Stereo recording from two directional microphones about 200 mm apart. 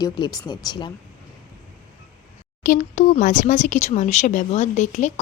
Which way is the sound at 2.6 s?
40° left (ahead or behind).